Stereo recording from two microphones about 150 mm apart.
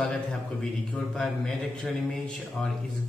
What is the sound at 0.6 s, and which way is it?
A man's voice, 5° left (ahead or behind).